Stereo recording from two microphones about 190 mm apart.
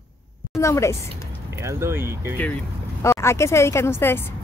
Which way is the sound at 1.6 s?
15° right (ahead or behind).